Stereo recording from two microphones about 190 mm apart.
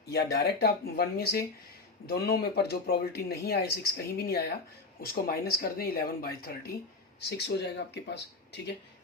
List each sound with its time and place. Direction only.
0.1 s speech: 55° left (ahead or behind)